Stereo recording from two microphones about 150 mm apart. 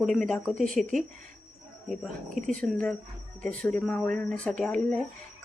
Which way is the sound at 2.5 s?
5° left (ahead or behind).